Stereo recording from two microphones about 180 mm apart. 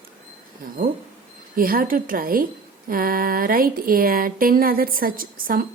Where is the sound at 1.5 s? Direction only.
55° right (ahead or behind).